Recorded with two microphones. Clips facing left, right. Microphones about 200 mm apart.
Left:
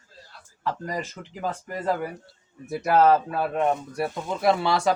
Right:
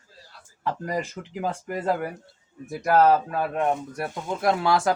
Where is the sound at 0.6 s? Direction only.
10° right (ahead or behind).